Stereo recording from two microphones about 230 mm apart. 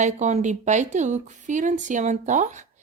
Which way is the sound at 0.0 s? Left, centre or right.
Right.